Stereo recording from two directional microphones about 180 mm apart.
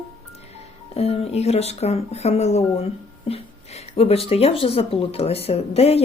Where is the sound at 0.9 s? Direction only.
35° left (ahead or behind).